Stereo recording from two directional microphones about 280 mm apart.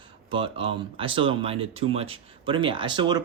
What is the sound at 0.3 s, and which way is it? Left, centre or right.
Speech, centre.